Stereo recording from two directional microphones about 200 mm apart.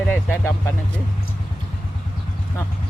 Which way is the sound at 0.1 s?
10° left (ahead or behind).